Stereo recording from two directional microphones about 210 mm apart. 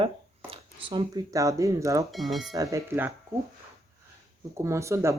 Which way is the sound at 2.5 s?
15° right (ahead or behind).